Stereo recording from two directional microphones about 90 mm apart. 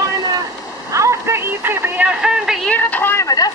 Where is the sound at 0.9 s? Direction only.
35° right (ahead or behind).